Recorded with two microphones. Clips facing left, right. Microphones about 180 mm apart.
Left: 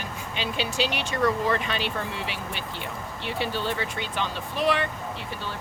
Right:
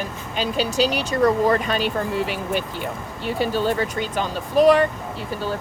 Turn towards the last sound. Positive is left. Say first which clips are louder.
# right 7 dB
turn(degrees=-40)  # may be behind; listen again after turning